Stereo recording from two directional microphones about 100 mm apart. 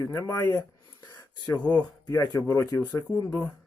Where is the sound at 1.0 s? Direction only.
40° left (ahead or behind).